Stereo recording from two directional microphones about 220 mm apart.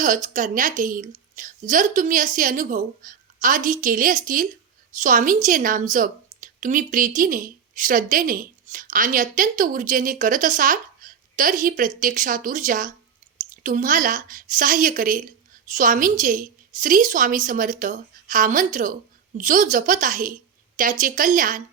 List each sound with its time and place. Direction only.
0.0 s a woman's voice: 35° right (ahead or behind)